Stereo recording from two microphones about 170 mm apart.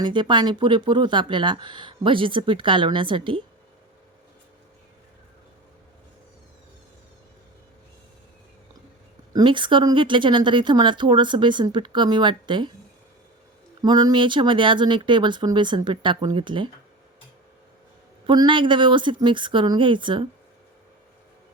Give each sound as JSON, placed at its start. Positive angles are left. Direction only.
{"t": 0.0, "sound": "speech", "side_deg": -25}
{"t": 9.3, "sound": "speech", "side_deg": -30}
{"t": 13.8, "sound": "speech", "side_deg": -25}
{"t": 18.3, "sound": "speech", "side_deg": -30}